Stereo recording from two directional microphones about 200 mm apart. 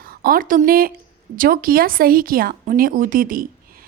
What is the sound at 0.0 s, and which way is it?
A woman's voice, 45° right (ahead or behind).